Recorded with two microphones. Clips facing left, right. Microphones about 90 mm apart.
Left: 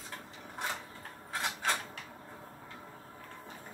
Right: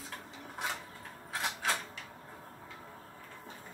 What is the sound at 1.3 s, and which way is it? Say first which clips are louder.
Mechanisms: left 1 dB; centre (ahead or behind).